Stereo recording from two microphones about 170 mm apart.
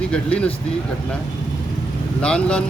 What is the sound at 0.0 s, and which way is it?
Speech, 5° left (ahead or behind).